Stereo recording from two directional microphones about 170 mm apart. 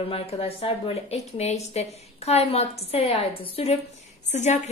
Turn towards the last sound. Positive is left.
turn(degrees=45)  # may be behind; listen again after turning